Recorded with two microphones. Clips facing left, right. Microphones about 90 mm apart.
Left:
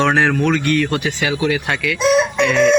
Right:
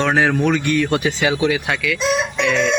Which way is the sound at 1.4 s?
5° right (ahead or behind).